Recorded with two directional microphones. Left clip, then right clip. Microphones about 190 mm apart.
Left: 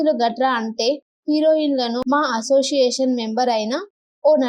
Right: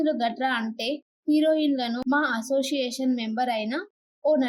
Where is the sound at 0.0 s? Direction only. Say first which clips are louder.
Left 7 dB; 20° left (ahead or behind).